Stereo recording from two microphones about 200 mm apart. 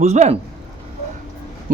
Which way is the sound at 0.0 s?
35° right (ahead or behind).